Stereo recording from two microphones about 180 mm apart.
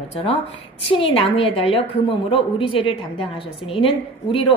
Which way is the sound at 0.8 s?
30° left (ahead or behind).